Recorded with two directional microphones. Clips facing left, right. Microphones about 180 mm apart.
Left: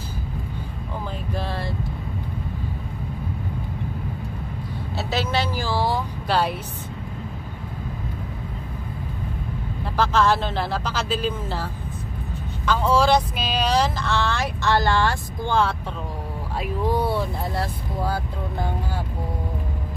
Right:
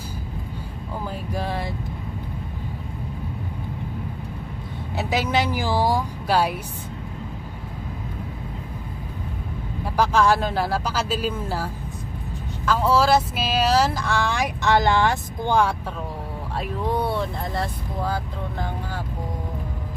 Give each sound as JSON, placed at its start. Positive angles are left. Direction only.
{"t": 1.3, "sound": "speech", "side_deg": -15}
{"t": 4.9, "sound": "speech", "side_deg": -15}
{"t": 9.9, "sound": "speech", "side_deg": -10}
{"t": 16.8, "sound": "speech", "side_deg": 5}